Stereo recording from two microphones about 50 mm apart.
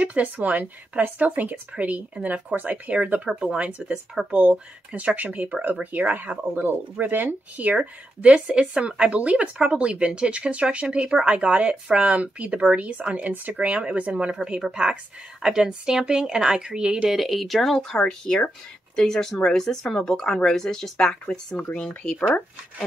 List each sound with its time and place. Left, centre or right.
0.0 s speech: right
4.3 s speech: right
7.5 s speech: right
17.1 s speech: centre